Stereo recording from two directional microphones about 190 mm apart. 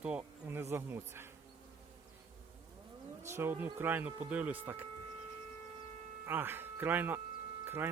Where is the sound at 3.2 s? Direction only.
15° right (ahead or behind).